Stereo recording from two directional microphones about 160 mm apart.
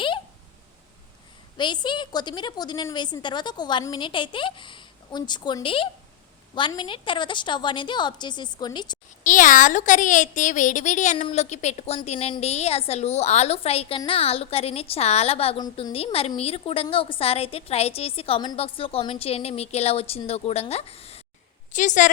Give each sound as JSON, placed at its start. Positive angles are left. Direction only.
{"t": 1.5, "sound": "a woman's voice", "side_deg": 30}
{"t": 9.2, "sound": "a woman's voice", "side_deg": 55}
{"t": 21.7, "sound": "a woman's voice", "side_deg": 50}